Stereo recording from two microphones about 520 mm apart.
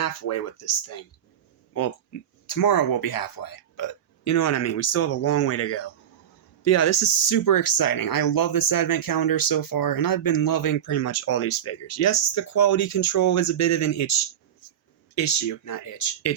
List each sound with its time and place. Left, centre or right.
0.0 s speech: left
2.5 s speech: left